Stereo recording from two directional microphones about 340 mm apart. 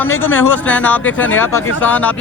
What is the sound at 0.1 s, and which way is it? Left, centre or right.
Speech, left.